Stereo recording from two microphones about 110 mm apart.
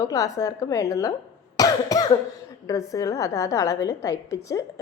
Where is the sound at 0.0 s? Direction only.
30° left (ahead or behind).